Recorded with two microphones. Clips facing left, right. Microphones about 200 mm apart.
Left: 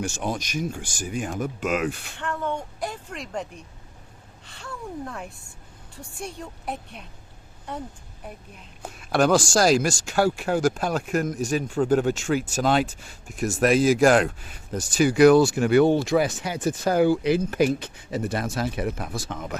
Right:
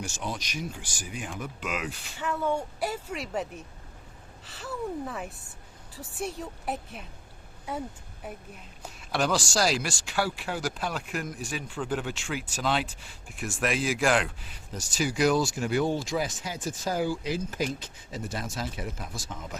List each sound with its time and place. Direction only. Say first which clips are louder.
0.0 s speech: left 7 dB; 50° left (ahead or behind)
2.1 s a woman's voice: even; 5° right (ahead or behind)
8.8 s speech: left 7 dB; 55° left (ahead or behind)